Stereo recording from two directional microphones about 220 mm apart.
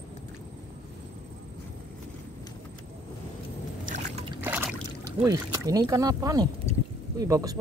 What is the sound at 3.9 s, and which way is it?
Boat, 30° right (ahead or behind).